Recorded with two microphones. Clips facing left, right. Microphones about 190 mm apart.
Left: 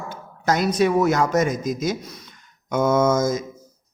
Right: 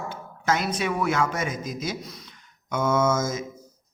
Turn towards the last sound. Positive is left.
turn(degrees=35)  # may be behind; listen again after turning